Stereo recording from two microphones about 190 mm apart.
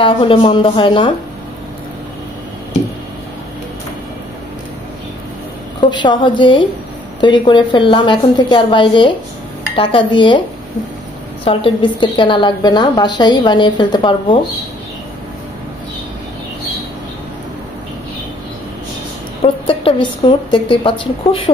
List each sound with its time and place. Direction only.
0.0 s a woman's voice: 25° left (ahead or behind)
5.8 s a woman's voice: 25° left (ahead or behind)
11.4 s a woman's voice: 25° left (ahead or behind)
19.4 s a woman's voice: 30° left (ahead or behind)